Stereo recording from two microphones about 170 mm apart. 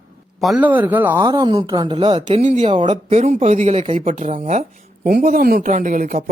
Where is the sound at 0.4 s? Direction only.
5° right (ahead or behind).